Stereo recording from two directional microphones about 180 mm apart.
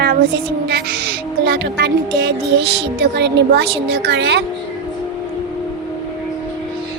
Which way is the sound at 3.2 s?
70° right (ahead or behind).